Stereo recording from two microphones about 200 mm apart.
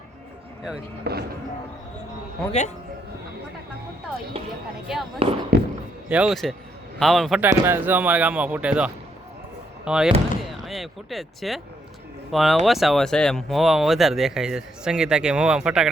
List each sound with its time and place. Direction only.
1.1 s speech: 50° right (ahead or behind)
2.5 s a man's voice: 35° left (ahead or behind)
4.9 s speech: centre (ahead or behind)
5.5 s speech: 50° right (ahead or behind)
6.1 s speech: 5° right (ahead or behind)